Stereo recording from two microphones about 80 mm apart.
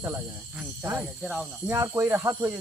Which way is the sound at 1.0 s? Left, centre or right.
Centre.